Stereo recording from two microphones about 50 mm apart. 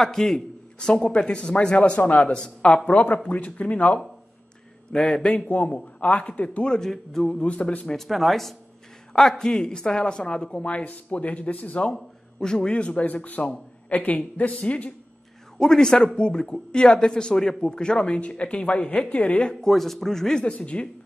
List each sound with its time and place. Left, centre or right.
0.0 s speech: centre
2.0 s a man's voice: left
4.9 s speech: centre
5.7 s speech: left
7.9 s speech: centre; by 11.9 s left
11.9 s speech: centre
15.6 s speech: centre
19.6 s speech: centre
20.5 s speech: left